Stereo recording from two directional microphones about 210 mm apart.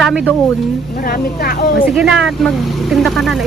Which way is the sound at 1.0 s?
45° left (ahead or behind).